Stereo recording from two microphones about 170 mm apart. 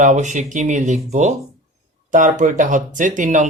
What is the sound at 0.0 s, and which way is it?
Speech, 45° right (ahead or behind).